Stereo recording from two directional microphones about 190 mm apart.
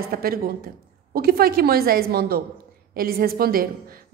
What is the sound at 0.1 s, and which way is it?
A woman's voice, 50° right (ahead or behind).